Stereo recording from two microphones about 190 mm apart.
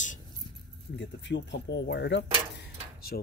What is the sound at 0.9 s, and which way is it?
Speech, 70° left (ahead or behind).